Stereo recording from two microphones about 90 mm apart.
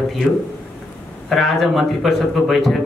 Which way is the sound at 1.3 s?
Centre (ahead or behind).